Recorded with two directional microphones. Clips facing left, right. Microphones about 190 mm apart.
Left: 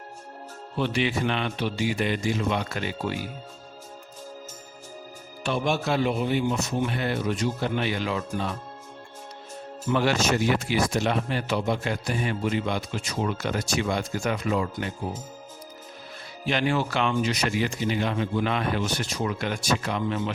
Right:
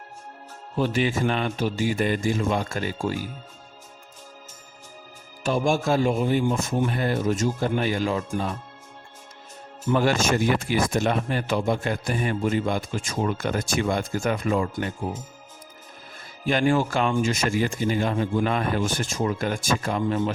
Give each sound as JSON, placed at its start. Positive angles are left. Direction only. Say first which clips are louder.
{"t": 0.8, "sound": "speech", "louder": "right 2 dB", "side_deg": -45}
{"t": 5.4, "sound": "speech", "louder": "right 3 dB", "side_deg": -40}
{"t": 9.9, "sound": "speech", "louder": "right 2 dB", "side_deg": -45}
{"t": 16.5, "sound": "speech", "louder": "right 4 dB", "side_deg": -45}